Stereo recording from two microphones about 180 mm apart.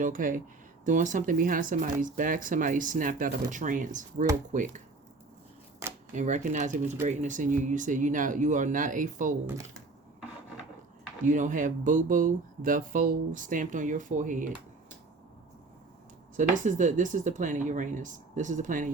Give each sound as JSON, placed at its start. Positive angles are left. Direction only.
{"t": 0.0, "sound": "speech", "side_deg": -50}
{"t": 6.1, "sound": "speech", "side_deg": -40}
{"t": 11.3, "sound": "speech", "side_deg": -45}
{"t": 16.4, "sound": "speech", "side_deg": -45}